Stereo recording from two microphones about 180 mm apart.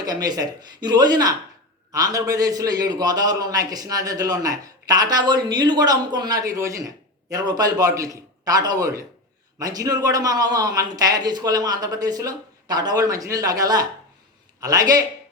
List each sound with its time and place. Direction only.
0.0 s a man's voice: 20° right (ahead or behind)